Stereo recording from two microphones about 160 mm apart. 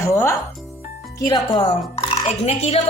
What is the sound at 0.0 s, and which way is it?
Music, 15° left (ahead or behind).